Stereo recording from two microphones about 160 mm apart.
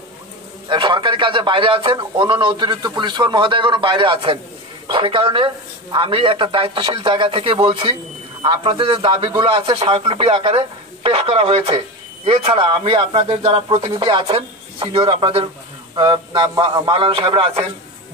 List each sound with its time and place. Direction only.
0.7 s a man's voice: 30° right (ahead or behind)